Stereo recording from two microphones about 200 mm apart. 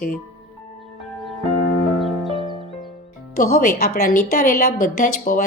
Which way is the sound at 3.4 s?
45° left (ahead or behind).